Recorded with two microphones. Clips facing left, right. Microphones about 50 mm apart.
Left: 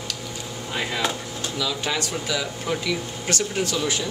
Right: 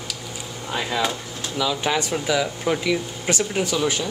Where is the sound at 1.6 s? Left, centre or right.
Centre.